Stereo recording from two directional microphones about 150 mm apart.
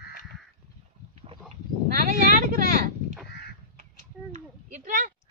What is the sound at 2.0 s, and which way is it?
Vehicle, 75° right (ahead or behind).